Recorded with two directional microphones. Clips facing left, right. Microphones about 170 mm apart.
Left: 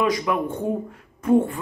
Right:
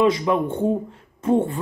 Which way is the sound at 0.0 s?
25° right (ahead or behind).